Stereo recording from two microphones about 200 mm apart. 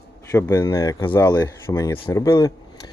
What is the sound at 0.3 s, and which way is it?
Speech, 15° left (ahead or behind).